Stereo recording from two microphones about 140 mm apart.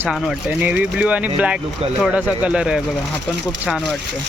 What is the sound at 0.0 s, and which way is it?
Speech, 5° right (ahead or behind).